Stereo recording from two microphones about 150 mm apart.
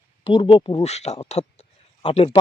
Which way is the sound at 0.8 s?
45° left (ahead or behind).